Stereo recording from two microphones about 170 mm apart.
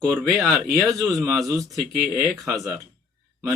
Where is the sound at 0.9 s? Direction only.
20° right (ahead or behind).